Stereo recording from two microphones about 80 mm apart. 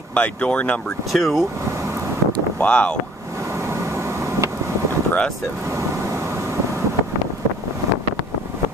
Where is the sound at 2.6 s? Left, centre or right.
Centre.